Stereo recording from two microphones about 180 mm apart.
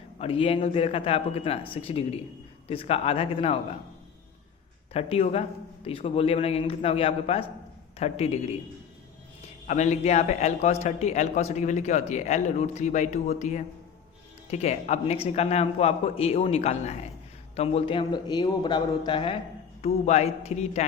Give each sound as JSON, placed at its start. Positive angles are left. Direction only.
{"t": 0.2, "sound": "a man's voice", "side_deg": 30}
{"t": 4.9, "sound": "a man's voice", "side_deg": 35}
{"t": 9.6, "sound": "a man's voice", "side_deg": 40}